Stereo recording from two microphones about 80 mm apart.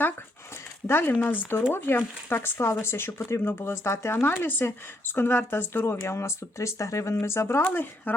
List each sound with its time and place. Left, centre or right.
0.9 s speech: left